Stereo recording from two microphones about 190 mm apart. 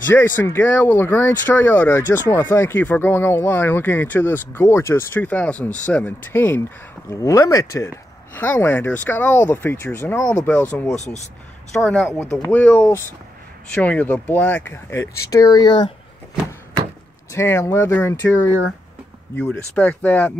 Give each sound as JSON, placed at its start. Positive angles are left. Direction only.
{"t": 0.1, "sound": "speech", "side_deg": 10}
{"t": 12.1, "sound": "speech", "side_deg": 15}
{"t": 17.3, "sound": "speech", "side_deg": 15}